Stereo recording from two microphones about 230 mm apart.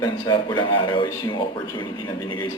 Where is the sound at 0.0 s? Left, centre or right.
Centre.